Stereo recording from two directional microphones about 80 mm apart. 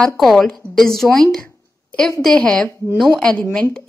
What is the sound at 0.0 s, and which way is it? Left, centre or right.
A woman's voice, centre.